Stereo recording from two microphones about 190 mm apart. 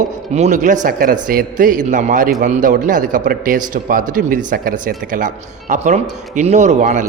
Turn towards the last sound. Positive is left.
turn(degrees=-40)  # may be behind; listen again after turning